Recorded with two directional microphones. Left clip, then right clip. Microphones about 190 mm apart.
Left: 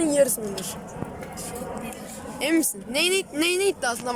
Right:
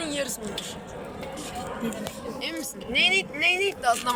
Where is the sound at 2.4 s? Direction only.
65° left (ahead or behind); by 3.7 s 85° left.